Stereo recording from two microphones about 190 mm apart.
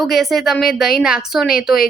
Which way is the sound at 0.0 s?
Centre (ahead or behind).